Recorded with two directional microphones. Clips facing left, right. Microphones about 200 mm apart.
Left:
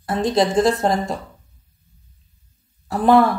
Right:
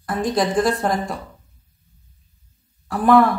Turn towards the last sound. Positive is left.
turn(degrees=25)  # may be behind; listen again after turning